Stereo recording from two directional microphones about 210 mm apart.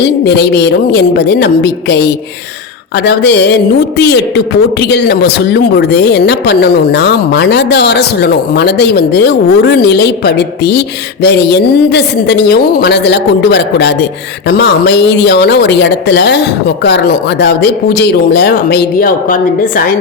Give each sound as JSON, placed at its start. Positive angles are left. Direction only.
{"t": 0.0, "sound": "speech", "side_deg": 55}